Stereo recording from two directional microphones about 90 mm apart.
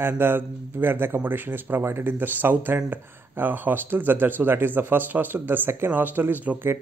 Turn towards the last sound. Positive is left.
turn(degrees=-20)  # may be behind; listen again after turning